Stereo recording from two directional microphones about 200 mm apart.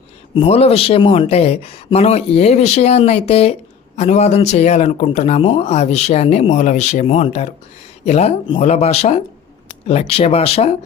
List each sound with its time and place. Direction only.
0.3 s speech: 30° left (ahead or behind)